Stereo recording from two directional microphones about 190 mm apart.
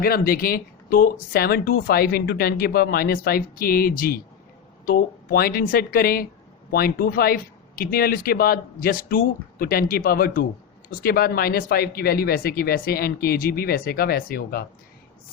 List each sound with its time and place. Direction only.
0.0 s speech: 50° left (ahead or behind)